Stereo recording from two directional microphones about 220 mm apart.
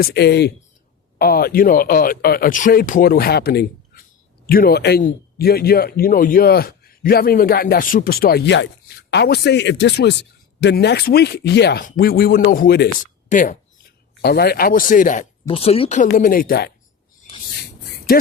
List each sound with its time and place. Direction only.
0.0 s a man's voice: 50° left (ahead or behind)
13.2 s speech: 35° left (ahead or behind)
14.2 s speech: 45° left (ahead or behind)